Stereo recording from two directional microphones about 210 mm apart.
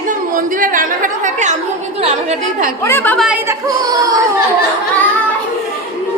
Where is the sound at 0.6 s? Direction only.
40° right (ahead or behind).